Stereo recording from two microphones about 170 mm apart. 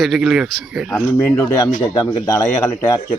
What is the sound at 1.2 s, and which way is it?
A man's voice, 15° left (ahead or behind).